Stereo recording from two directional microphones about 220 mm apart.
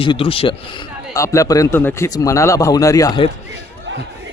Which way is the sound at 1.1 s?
15° left (ahead or behind).